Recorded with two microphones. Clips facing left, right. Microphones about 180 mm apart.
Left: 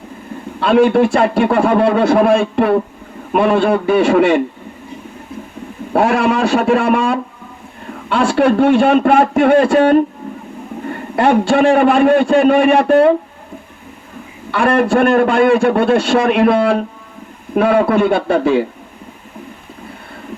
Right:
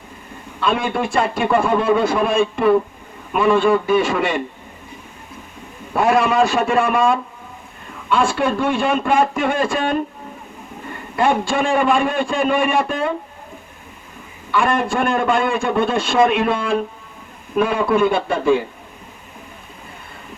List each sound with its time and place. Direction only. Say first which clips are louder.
0.6 s a man's voice: left 9 dB; 70° left (ahead or behind)
5.9 s a man's voice: left 3 dB; 70° left (ahead or behind)
14.5 s a man's voice: left 6 dB; 70° left (ahead or behind)